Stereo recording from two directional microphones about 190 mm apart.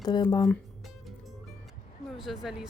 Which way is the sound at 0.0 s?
20° left (ahead or behind).